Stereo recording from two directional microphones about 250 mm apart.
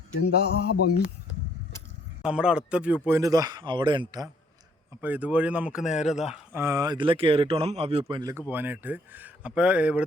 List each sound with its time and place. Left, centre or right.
0.2 s a sound: left
2.2 s a man's voice: centre
4.9 s speech: centre
5.9 s speech: left
6.3 s a man's voice: centre